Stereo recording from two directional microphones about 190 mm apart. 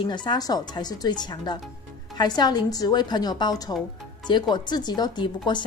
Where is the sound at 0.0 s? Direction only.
25° left (ahead or behind).